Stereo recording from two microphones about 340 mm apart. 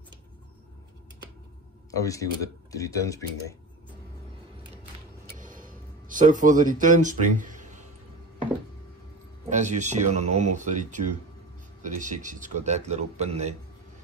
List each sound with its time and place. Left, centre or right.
2.0 s speech: centre
5.4 s a sound: right
9.5 s a man's voice: right